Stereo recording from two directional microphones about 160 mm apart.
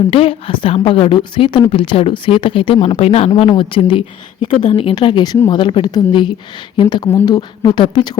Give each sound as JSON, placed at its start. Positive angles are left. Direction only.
{"t": 0.1, "sound": "a woman's voice", "side_deg": 35}